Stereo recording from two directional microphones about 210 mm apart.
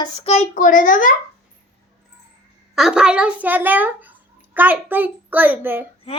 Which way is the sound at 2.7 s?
5° right (ahead or behind).